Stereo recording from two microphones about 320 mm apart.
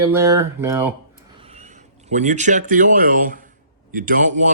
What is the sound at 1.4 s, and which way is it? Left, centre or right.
A man's voice, right.